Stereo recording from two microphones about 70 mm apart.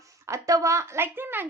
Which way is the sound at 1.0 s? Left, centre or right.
Right.